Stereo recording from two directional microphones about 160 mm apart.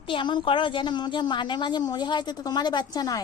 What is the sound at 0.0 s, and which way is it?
A woman's voice, 30° left (ahead or behind).